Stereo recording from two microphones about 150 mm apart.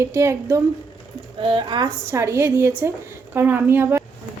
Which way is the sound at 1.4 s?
35° right (ahead or behind).